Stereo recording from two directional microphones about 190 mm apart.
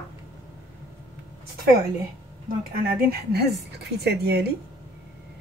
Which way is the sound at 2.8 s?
55° right (ahead or behind).